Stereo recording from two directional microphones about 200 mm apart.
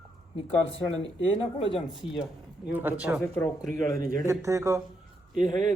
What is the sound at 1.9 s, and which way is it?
A man's voice, centre (ahead or behind).